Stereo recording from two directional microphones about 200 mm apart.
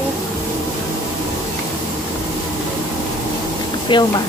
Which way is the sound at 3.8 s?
20° left (ahead or behind).